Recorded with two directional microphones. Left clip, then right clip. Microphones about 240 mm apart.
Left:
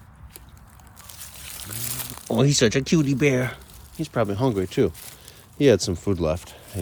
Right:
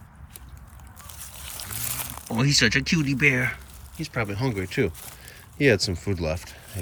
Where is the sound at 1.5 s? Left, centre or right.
Centre.